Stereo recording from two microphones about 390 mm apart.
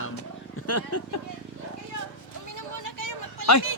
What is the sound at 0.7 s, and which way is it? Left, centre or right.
Speech, left.